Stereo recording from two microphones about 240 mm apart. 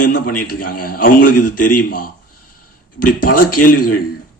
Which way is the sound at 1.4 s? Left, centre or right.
Left.